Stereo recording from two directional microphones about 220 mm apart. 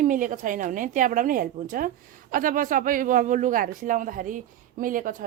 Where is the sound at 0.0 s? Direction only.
35° right (ahead or behind).